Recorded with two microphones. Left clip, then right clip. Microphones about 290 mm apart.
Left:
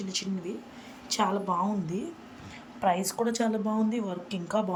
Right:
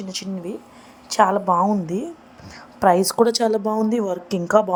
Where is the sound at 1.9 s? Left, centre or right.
Centre.